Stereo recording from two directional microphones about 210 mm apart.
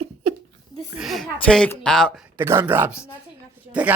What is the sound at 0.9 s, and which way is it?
A woman's voice, centre (ahead or behind).